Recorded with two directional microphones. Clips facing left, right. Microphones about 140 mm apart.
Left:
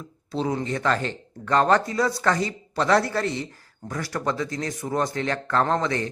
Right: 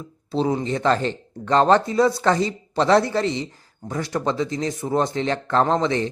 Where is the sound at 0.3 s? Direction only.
30° right (ahead or behind).